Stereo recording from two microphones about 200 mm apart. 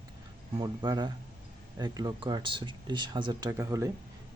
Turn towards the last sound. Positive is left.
turn(degrees=-15)  # may be behind; listen again after turning